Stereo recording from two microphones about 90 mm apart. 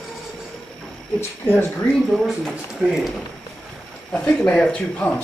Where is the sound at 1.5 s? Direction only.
25° left (ahead or behind).